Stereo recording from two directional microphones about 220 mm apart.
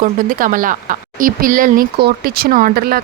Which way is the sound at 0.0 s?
40° right (ahead or behind).